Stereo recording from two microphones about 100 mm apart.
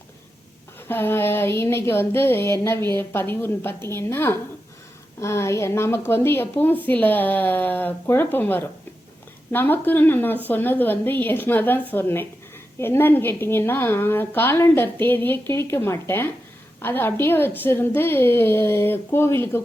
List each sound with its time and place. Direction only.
0.9 s a woman's voice: 20° left (ahead or behind)